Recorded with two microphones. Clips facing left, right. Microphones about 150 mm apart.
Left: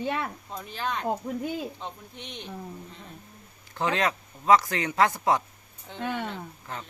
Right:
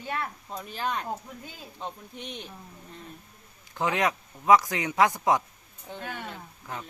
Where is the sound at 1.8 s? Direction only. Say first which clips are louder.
Right 2 dB; 5° right (ahead or behind).